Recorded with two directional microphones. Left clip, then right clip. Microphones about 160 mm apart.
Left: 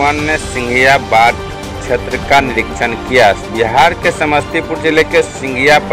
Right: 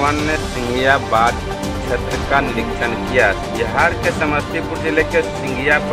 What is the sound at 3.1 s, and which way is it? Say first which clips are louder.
Speech: left 7 dB; 30° left (ahead or behind).